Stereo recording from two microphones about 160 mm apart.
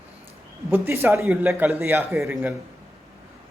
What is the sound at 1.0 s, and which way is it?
Speech, 15° right (ahead or behind).